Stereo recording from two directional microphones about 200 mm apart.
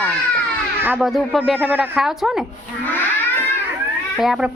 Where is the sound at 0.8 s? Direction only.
5° right (ahead or behind).